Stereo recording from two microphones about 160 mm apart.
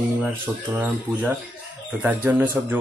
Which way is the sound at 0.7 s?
15° right (ahead or behind).